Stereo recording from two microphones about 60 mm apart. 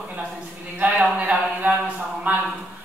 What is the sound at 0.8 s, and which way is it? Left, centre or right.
Speech, right.